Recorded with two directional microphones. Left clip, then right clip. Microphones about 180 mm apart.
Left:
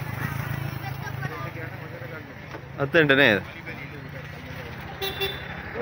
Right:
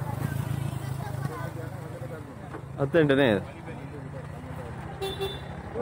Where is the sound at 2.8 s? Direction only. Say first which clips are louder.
Left 4 dB; 10° right (ahead or behind).